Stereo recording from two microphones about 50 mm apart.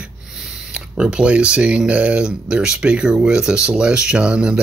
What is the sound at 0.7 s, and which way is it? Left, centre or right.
Speech, centre.